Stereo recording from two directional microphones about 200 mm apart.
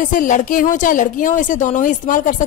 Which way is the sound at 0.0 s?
40° left (ahead or behind).